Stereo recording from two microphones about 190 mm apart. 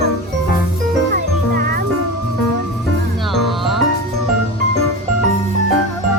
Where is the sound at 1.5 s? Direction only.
50° right (ahead or behind).